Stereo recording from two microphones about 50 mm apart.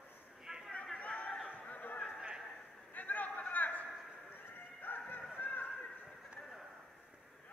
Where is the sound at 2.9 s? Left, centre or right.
Left.